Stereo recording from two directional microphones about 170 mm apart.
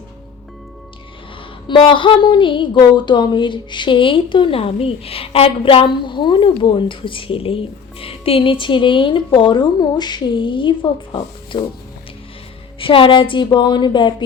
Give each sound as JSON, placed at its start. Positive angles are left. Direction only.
{"t": 1.6, "sound": "a woman's voice", "side_deg": 30}
{"t": 12.8, "sound": "a woman's voice", "side_deg": 30}